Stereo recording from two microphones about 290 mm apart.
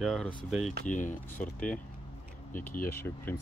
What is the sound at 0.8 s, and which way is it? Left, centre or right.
Speech, left.